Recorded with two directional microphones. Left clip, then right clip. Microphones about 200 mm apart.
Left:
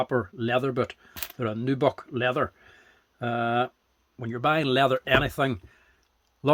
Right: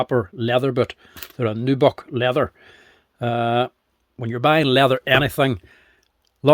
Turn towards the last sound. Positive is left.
turn(degrees=-40)  # may be behind; listen again after turning